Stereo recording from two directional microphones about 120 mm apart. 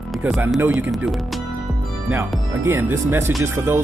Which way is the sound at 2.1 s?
20° right (ahead or behind).